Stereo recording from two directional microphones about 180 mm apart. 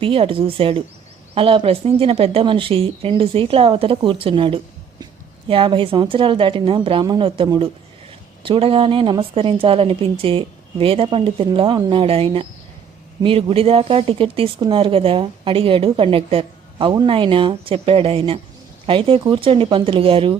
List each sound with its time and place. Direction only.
0.0 s a woman's voice: 30° right (ahead or behind)